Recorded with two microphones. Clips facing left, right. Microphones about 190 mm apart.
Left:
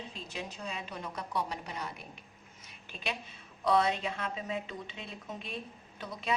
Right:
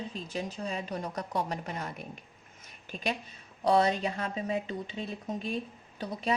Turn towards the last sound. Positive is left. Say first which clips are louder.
# right 4 dB
turn(degrees=-35)  # may be behind; listen again after turning